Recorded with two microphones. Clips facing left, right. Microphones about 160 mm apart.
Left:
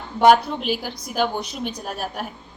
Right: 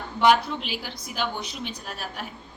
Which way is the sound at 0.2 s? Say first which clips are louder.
Left 5 dB; 45° left (ahead or behind).